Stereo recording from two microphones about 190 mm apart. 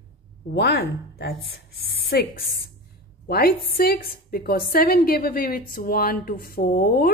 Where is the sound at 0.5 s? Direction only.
55° left (ahead or behind).